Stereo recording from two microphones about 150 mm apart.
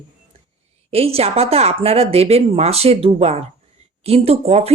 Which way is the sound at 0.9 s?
40° right (ahead or behind).